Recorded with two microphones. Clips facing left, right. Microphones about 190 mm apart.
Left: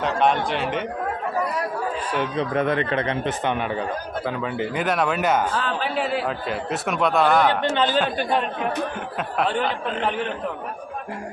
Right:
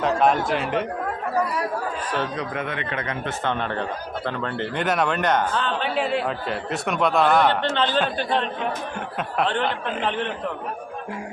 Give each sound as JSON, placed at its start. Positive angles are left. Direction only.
{"t": 0.0, "sound": "a man's voice", "side_deg": 0}
{"t": 2.4, "sound": "speech", "side_deg": 35}
{"t": 3.2, "sound": "a man's voice", "side_deg": 15}
{"t": 7.6, "sound": "a man's voice", "side_deg": 10}